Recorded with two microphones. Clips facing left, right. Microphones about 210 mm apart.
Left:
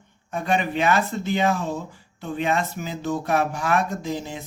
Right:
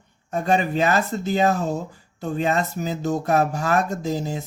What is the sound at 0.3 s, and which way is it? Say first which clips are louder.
Speech: right 3 dB; 40° right (ahead or behind).